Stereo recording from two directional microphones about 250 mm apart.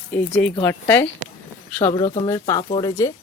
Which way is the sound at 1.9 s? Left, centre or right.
Left.